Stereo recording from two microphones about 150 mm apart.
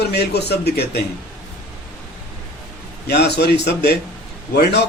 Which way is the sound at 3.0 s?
90° left.